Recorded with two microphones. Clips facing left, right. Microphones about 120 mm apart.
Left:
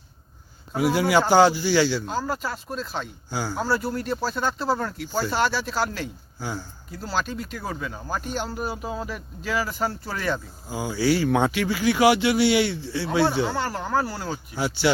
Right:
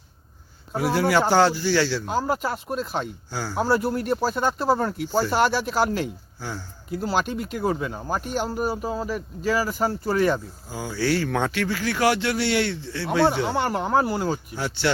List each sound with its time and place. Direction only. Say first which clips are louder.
0.8 s speech: even; 5° left (ahead or behind)
2.0 s speech: right 3 dB; 15° right (ahead or behind)
3.2 s speech: left 1 dB; centre (ahead or behind)
4.1 s speech: right 3 dB; 15° right (ahead or behind)
6.9 s speech: right 4 dB; 60° right (ahead or behind)
7.6 s speech: right 7 dB; 5° right (ahead or behind)
10.7 s speech: left 2 dB; 10° left (ahead or behind)
13.2 s speech: right 2 dB; 20° right (ahead or behind)
14.5 s speech: left 2 dB; 5° left (ahead or behind)